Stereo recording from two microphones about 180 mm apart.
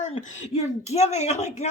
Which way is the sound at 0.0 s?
40° left (ahead or behind).